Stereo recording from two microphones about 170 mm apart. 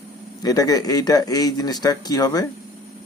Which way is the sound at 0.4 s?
20° left (ahead or behind).